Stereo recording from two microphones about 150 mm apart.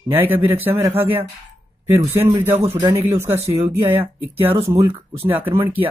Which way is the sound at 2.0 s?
25° right (ahead or behind).